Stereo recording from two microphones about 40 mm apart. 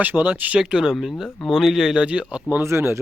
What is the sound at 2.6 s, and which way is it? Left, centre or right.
Speech, right.